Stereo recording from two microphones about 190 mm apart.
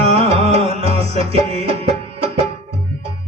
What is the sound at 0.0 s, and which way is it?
Music, 30° right (ahead or behind).